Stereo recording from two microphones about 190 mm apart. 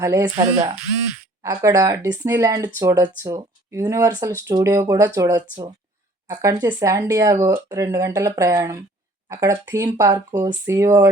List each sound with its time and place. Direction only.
0.0 s speech: 15° right (ahead or behind)
0.3 s speech: 35° right (ahead or behind)
1.4 s speech: 15° right (ahead or behind)